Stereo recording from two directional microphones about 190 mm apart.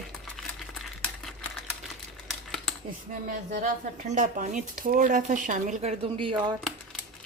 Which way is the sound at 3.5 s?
40° right (ahead or behind).